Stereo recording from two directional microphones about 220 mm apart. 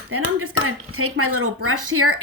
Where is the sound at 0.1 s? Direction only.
75° right (ahead or behind).